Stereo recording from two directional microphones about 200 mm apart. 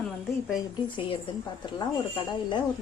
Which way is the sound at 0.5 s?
25° left (ahead or behind).